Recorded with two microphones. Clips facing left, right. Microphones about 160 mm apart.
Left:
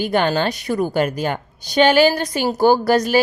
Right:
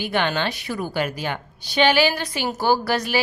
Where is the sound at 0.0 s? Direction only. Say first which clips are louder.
Left 5 dB; 40° left (ahead or behind).